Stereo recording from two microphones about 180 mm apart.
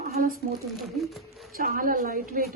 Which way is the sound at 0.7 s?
Centre (ahead or behind).